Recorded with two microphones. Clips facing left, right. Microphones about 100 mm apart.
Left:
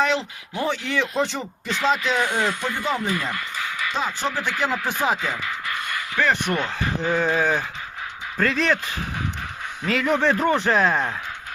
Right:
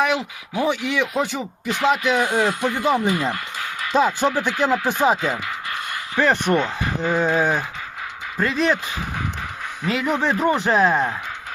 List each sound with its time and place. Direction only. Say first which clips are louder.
0.0 s speech: right 1 dB; 10° right (ahead or behind)
3.3 s music: even; 40° right (ahead or behind)
4.3 s speech: right 4 dB; 50° right (ahead or behind)
4.5 s speech: right 4 dB; 30° right (ahead or behind)
7.0 s speech: right 2 dB; 15° right (ahead or behind)
9.8 s speech: left 1 dB; 15° right (ahead or behind)